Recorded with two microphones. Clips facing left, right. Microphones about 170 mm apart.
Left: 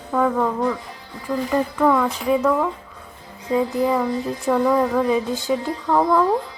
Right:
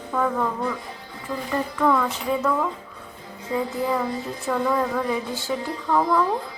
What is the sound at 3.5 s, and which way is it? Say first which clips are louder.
Music: left 5 dB; 20° left (ahead or behind).